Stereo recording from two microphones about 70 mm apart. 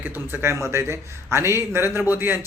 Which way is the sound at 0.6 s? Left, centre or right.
Right.